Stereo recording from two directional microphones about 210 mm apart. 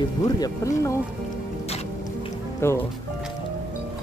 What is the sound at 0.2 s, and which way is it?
Speech, 15° left (ahead or behind).